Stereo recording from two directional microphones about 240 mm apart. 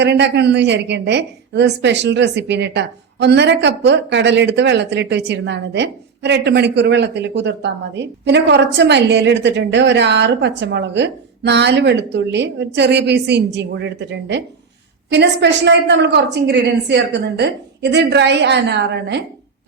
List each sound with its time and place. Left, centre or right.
0.0 s a woman's voice: right